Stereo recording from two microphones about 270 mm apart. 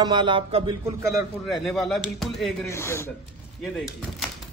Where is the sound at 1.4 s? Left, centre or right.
Centre.